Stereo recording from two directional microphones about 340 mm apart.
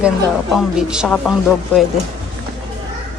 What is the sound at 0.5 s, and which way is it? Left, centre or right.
Speech, centre.